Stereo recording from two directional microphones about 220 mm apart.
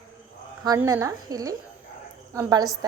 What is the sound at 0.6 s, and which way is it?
A woman's voice, 15° right (ahead or behind).